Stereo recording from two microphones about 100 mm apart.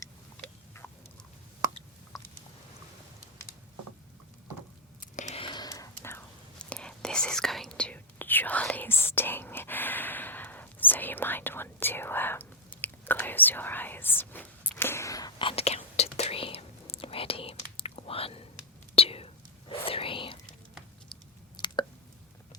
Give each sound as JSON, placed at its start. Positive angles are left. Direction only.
{"t": 5.6, "sound": "whispering", "side_deg": 30}
{"t": 6.6, "sound": "whispering", "side_deg": 10}
{"t": 15.4, "sound": "whispering", "side_deg": 75}
{"t": 21.5, "sound": "a sound", "side_deg": 50}